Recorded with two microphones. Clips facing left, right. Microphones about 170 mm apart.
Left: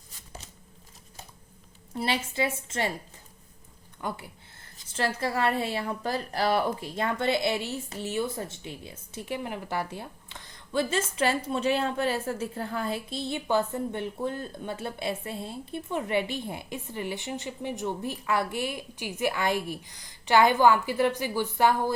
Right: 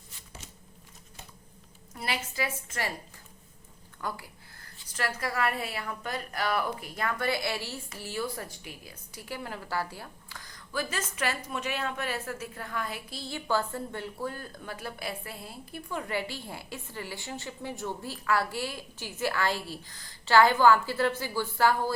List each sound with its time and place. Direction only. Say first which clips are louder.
2.0 s a woman's voice: left 5 dB; 25° left (ahead or behind)
4.0 s a woman's voice: left 2 dB; 25° left (ahead or behind)